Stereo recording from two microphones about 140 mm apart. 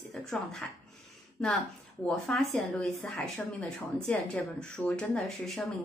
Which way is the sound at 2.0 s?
5° left (ahead or behind).